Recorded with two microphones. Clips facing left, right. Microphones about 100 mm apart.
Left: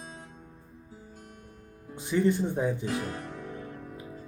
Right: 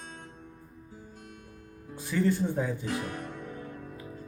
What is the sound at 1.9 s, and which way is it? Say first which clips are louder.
Speech: left 2 dB; 20° left (ahead or behind).